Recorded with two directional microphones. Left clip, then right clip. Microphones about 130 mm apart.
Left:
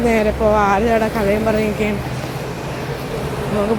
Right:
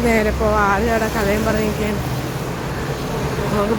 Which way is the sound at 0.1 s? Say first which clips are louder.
Left 3 dB; 15° left (ahead or behind).